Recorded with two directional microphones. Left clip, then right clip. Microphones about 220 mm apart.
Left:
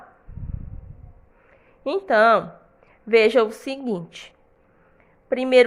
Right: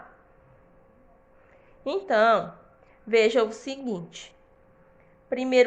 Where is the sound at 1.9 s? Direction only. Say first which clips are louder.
Left 4 dB; 30° left (ahead or behind).